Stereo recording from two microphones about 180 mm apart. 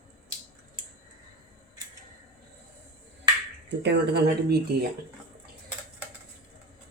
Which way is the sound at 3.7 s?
70° right (ahead or behind).